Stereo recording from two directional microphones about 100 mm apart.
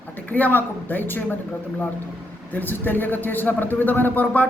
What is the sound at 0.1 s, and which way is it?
Speech, 15° left (ahead or behind).